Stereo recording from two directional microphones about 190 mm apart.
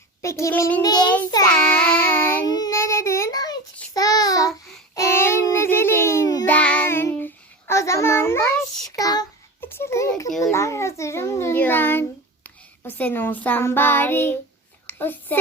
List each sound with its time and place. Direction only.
0.2 s child singing: 15° left (ahead or behind)
1.5 s child singing: 5° left (ahead or behind)
10.4 s a sound: 15° left (ahead or behind)